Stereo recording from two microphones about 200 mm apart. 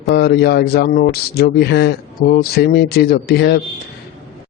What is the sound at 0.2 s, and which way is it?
Speech, 55° left (ahead or behind).